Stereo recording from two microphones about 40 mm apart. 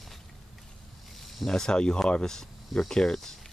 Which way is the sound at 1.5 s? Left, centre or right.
Left.